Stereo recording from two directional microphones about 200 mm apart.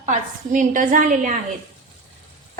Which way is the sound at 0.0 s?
40° right (ahead or behind).